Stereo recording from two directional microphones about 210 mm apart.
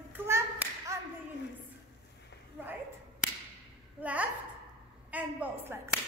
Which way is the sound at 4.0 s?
5° right (ahead or behind).